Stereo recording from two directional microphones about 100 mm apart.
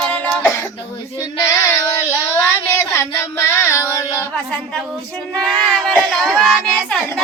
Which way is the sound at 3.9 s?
30° left (ahead or behind).